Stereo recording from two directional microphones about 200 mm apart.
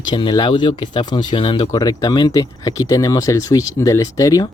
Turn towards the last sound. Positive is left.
turn(degrees=15)  # may be behind; listen again after turning